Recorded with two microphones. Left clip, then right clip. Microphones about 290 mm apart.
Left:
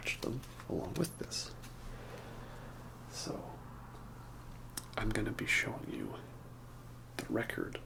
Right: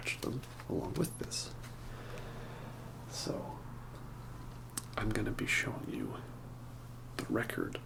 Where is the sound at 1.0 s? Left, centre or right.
Centre.